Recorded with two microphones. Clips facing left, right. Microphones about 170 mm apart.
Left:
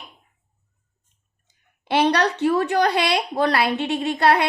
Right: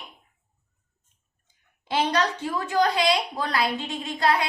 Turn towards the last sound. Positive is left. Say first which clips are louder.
# left 5 dB
turn(degrees=70)  # may be behind; listen again after turning